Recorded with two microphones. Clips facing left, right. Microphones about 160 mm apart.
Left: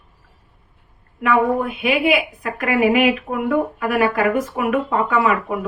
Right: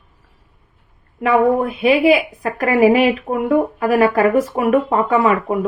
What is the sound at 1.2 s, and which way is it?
A woman's voice, 35° right (ahead or behind).